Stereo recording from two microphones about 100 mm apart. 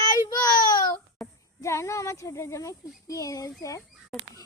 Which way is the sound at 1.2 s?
Centre (ahead or behind).